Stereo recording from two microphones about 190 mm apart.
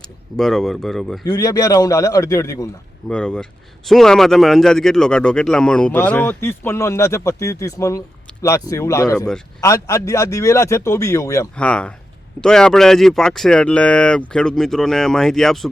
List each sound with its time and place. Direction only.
0.3 s speech: centre (ahead or behind)
1.2 s speech: 20° left (ahead or behind)
3.1 s speech: 5° left (ahead or behind)
9.1 s speech: 5° left (ahead or behind)
9.6 s speech: 15° left (ahead or behind)
11.5 s speech: 5° left (ahead or behind)